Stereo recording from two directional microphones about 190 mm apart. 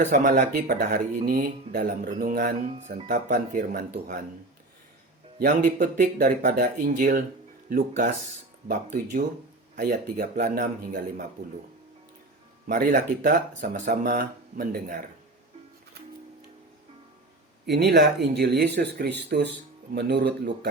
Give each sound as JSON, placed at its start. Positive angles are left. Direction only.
{"t": 0.0, "sound": "speech", "side_deg": -40}
{"t": 2.6, "sound": "speech", "side_deg": -35}
{"t": 5.4, "sound": "speech", "side_deg": -45}
{"t": 9.7, "sound": "speech", "side_deg": -60}
{"t": 10.3, "sound": "a man's voice", "side_deg": -40}
{"t": 12.6, "sound": "speech", "side_deg": -45}
{"t": 17.7, "sound": "speech", "side_deg": -60}